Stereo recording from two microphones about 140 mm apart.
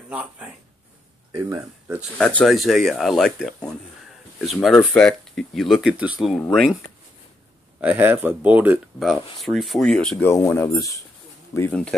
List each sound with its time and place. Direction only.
0.1 s speech: 10° right (ahead or behind)
1.3 s speech: 20° right (ahead or behind)
2.1 s speech: 5° left (ahead or behind)
7.8 s speech: 10° right (ahead or behind); by 11.7 s 20° left (ahead or behind)